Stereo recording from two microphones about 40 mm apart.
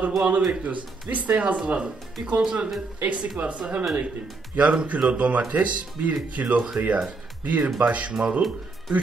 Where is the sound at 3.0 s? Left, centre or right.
Right.